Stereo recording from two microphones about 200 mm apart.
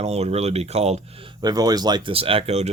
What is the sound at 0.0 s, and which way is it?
Speech, 30° right (ahead or behind).